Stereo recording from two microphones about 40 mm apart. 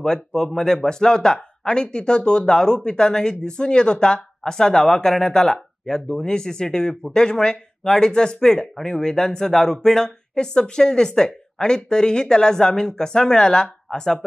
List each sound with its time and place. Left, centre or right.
0.0 s speech: centre